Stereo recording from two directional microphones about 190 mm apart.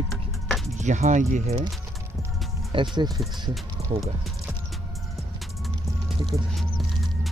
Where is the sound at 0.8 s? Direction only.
40° right (ahead or behind).